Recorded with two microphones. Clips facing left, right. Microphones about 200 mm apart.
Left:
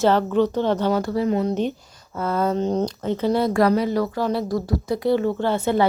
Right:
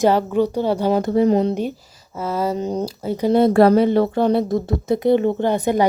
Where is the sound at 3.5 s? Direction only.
30° right (ahead or behind).